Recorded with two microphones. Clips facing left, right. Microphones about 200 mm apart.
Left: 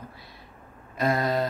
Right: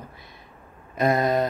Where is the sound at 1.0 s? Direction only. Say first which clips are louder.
Right 4 dB; 20° right (ahead or behind).